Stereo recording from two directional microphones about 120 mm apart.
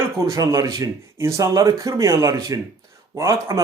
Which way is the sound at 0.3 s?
30° right (ahead or behind).